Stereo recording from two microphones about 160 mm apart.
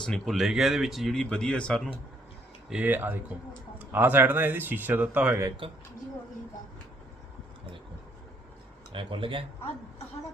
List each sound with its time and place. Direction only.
0.0 s speech: centre (ahead or behind)
2.6 s speech: 10° right (ahead or behind)
8.9 s speech: 35° right (ahead or behind)